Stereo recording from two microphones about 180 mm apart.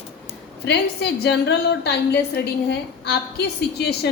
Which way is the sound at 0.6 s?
65° left (ahead or behind).